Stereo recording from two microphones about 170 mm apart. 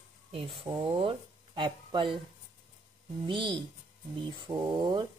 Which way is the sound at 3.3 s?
30° right (ahead or behind).